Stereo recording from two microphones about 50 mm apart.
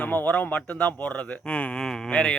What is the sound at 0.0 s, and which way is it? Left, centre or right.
Speech, left.